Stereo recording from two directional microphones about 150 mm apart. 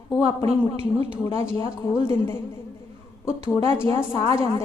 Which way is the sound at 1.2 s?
20° left (ahead or behind).